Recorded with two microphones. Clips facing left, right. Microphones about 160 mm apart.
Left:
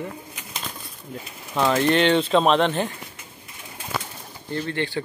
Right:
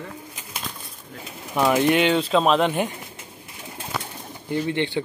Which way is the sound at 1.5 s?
15° right (ahead or behind).